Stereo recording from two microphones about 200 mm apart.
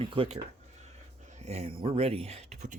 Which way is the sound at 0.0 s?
25° right (ahead or behind).